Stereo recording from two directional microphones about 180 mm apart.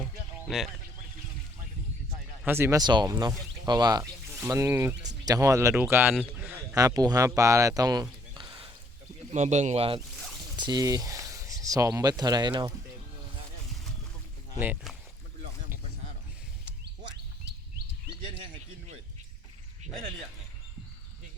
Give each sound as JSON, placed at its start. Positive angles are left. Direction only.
{"t": 0.4, "sound": "speech", "side_deg": 0}
{"t": 2.5, "sound": "speech", "side_deg": -15}
{"t": 8.3, "sound": "a sound", "side_deg": -25}
{"t": 9.3, "sound": "speech", "side_deg": -40}
{"t": 10.6, "sound": "speech", "side_deg": -20}
{"t": 14.6, "sound": "speech", "side_deg": -10}